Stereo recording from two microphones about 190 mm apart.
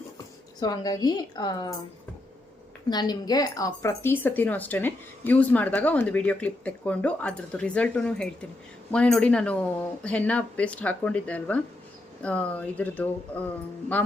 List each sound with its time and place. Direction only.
0.6 s a woman's voice: 20° left (ahead or behind)
2.9 s speech: 20° left (ahead or behind)